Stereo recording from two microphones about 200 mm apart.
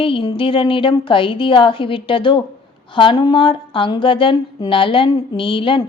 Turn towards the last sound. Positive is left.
turn(degrees=25)  # may be behind; listen again after turning